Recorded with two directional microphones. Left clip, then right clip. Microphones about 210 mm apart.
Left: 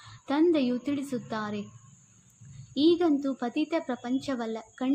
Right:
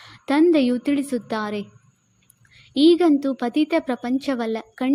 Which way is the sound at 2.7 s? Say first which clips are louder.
Right 8 dB; 40° right (ahead or behind).